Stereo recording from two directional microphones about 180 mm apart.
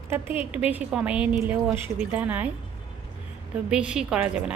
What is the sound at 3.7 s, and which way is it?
Speech, 5° right (ahead or behind).